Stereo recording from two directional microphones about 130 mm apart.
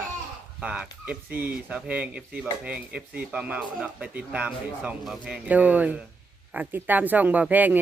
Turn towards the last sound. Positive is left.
turn(degrees=-10)  # may be behind; listen again after turning